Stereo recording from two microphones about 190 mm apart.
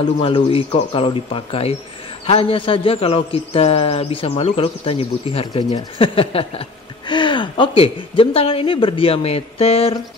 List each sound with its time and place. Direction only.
0.2 s a man's voice: 25° left (ahead or behind)